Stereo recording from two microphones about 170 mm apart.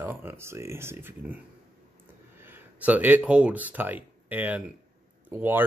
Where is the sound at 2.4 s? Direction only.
10° right (ahead or behind).